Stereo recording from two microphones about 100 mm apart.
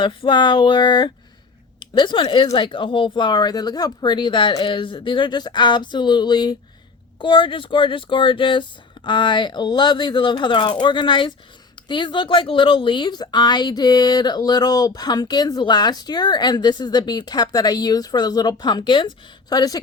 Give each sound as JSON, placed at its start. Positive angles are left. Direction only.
{"t": 0.0, "sound": "speech", "side_deg": 55}
{"t": 7.2, "sound": "speech", "side_deg": 55}